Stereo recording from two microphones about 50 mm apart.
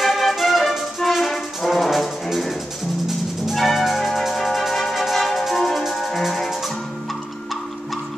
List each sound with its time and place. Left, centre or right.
0.0 s brass instrument: centre
2.2 s music: centre